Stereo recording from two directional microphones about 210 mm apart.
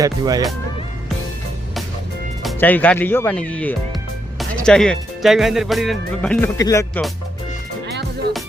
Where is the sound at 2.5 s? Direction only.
10° left (ahead or behind).